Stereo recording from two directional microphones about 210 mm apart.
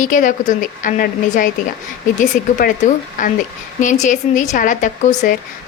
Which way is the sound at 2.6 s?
45° left (ahead or behind).